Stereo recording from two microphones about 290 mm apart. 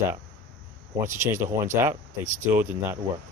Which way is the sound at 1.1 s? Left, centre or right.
Centre.